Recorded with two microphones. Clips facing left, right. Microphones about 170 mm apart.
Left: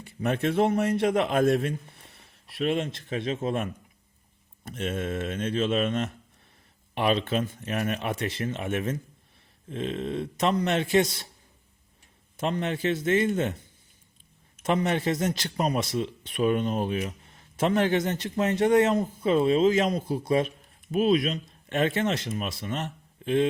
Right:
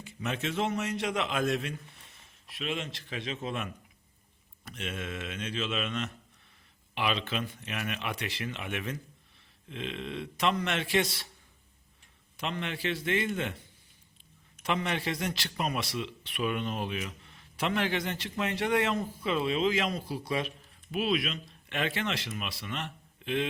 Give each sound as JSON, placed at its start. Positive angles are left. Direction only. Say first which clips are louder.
{"t": 0.2, "sound": "a man's voice", "louder": "left 8 dB", "side_deg": 55}
{"t": 2.0, "sound": "a sound", "louder": "left 3 dB", "side_deg": 65}
{"t": 3.2, "sound": "a man's voice", "louder": "left 7 dB", "side_deg": 50}
{"t": 4.7, "sound": "a man's voice", "louder": "left 8 dB", "side_deg": 50}
{"t": 12.4, "sound": "a man's voice", "louder": "left 7 dB", "side_deg": 45}
{"t": 14.7, "sound": "a man's voice", "louder": "left 6 dB", "side_deg": 45}